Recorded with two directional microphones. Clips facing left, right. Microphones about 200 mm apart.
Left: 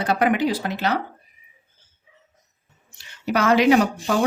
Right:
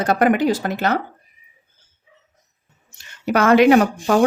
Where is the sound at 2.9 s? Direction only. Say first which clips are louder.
Right 4 dB; 50° right (ahead or behind).